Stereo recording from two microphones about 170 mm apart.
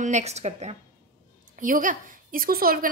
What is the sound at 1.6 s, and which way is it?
A woman's voice, 50° right (ahead or behind).